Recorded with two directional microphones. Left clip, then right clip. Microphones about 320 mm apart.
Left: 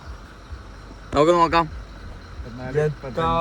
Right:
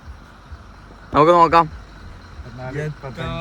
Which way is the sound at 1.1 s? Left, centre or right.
Centre.